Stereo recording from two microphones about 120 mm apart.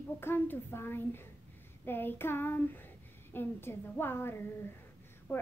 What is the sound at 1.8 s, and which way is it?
Child singing, 15° left (ahead or behind).